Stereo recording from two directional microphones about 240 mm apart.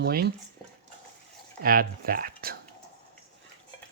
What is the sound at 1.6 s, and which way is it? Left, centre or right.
Speech, right.